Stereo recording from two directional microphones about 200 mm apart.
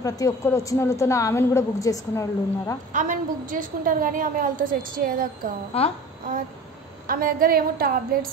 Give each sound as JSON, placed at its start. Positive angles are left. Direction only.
{"t": 0.0, "sound": "a woman's voice", "side_deg": 15}
{"t": 2.9, "sound": "a woman's voice", "side_deg": -40}
{"t": 5.7, "sound": "a woman's voice", "side_deg": 30}
{"t": 7.1, "sound": "a woman's voice", "side_deg": -45}